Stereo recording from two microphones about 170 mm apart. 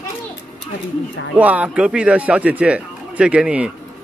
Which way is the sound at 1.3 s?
10° right (ahead or behind).